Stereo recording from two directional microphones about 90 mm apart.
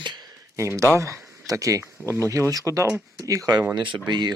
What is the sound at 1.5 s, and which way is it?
Speech, 35° right (ahead or behind).